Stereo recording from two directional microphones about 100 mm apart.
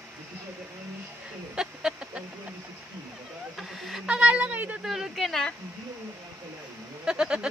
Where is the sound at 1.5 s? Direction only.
5° right (ahead or behind).